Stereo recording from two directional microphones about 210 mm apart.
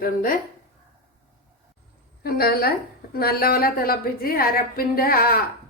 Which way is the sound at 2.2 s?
50° left (ahead or behind).